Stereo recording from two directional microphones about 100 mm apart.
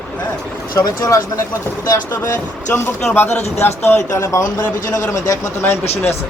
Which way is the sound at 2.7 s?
20° left (ahead or behind).